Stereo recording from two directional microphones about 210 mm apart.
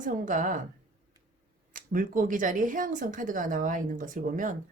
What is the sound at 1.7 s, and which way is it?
Speech, 40° right (ahead or behind).